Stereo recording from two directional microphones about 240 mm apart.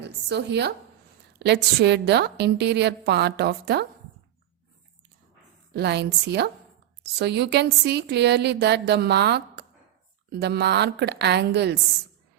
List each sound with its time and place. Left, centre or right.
0.0 s a woman's voice: right
5.7 s a woman's voice: right